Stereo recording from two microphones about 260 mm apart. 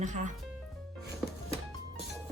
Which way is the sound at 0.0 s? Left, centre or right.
Right.